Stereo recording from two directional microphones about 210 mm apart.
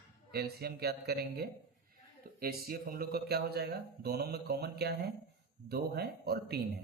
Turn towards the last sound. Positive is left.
turn(degrees=-50)  # may be behind; listen again after turning